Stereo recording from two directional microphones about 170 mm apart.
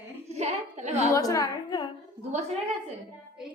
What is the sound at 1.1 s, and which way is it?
Speech, 20° left (ahead or behind).